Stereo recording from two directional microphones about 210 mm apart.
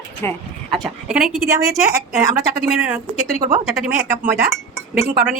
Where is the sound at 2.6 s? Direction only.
5° right (ahead or behind).